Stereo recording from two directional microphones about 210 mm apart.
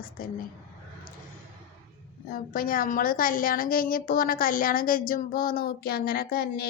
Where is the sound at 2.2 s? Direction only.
45° left (ahead or behind).